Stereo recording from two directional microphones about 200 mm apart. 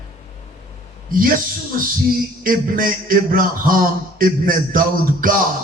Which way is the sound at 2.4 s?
45° right (ahead or behind).